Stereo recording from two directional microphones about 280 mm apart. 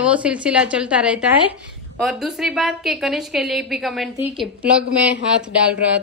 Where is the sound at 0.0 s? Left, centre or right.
Centre.